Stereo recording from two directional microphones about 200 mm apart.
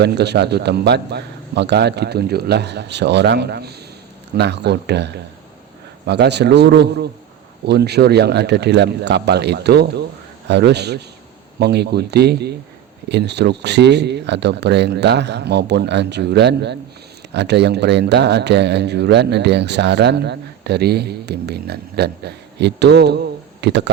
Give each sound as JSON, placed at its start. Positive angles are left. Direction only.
{"t": 0.0, "sound": "speech", "side_deg": -55}